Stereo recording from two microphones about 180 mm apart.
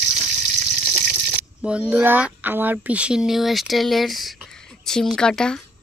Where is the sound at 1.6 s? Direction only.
5° right (ahead or behind).